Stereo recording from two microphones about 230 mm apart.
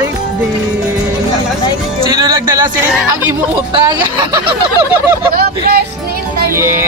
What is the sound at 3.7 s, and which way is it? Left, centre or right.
Speech, right.